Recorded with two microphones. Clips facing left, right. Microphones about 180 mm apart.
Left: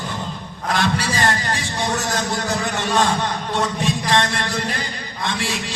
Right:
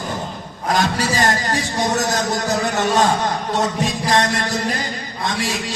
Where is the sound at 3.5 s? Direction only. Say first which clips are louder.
Even; 40° right (ahead or behind).